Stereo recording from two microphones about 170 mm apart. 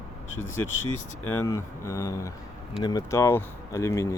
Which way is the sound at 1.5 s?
15° left (ahead or behind).